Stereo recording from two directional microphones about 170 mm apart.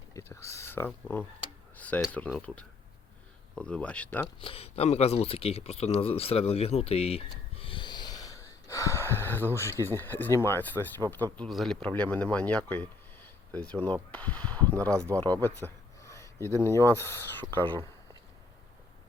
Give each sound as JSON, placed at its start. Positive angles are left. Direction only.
{"t": 0.1, "sound": "a sound", "side_deg": 15}
{"t": 1.7, "sound": "tick-tock", "side_deg": 10}
{"t": 2.1, "sound": "speech", "side_deg": 10}
{"t": 4.4, "sound": "speech", "side_deg": 35}
{"t": 15.1, "sound": "a sound", "side_deg": 10}
{"t": 16.6, "sound": "speech", "side_deg": 15}